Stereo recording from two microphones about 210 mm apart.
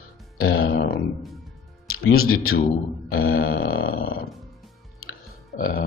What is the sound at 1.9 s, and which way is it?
Speech, 85° left.